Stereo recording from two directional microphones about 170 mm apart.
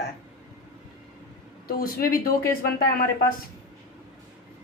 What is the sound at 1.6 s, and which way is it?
Speech, 60° left (ahead or behind).